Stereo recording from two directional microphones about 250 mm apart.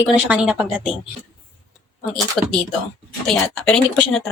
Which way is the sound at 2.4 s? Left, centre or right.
Centre.